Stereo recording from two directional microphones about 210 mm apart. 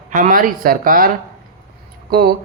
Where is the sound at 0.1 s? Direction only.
40° right (ahead or behind).